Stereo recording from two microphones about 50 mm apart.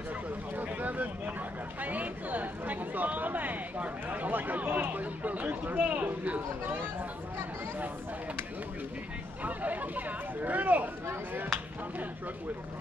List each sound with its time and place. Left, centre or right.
0.6 s a sound: right
1.8 s speech: right
9.4 s speech: right